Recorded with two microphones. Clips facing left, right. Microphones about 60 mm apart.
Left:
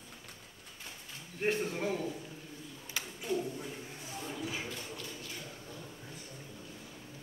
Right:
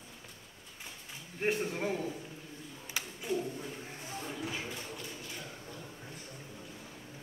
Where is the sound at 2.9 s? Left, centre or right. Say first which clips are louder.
Even; centre.